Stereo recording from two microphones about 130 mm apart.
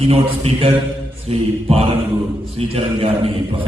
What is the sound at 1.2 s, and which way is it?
A man's voice, 50° right (ahead or behind).